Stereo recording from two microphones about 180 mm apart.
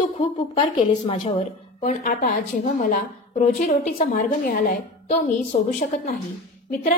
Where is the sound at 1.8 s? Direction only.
50° left (ahead or behind).